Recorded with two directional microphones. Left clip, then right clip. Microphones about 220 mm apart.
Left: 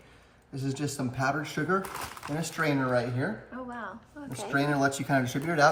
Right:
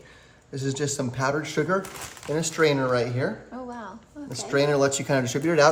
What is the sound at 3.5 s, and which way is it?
Speech, centre (ahead or behind).